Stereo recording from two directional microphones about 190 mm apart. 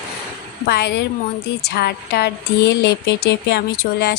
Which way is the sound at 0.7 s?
60° left (ahead or behind).